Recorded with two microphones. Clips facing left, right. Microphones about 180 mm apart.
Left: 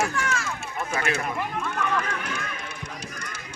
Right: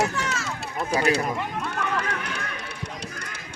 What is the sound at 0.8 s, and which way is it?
Speech, 35° right (ahead or behind).